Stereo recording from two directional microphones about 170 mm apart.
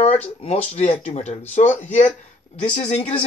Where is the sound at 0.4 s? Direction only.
35° left (ahead or behind).